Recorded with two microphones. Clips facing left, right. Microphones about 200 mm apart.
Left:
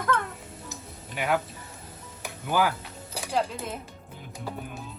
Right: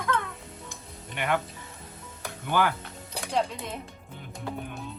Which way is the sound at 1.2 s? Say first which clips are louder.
Left 1 dB; 5° left (ahead or behind).